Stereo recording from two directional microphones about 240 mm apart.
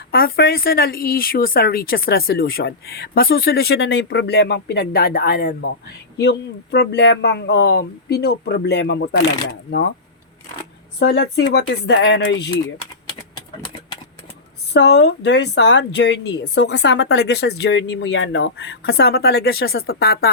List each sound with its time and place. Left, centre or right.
0.3 s speech: left
11.0 s speech: left
14.7 s speech: left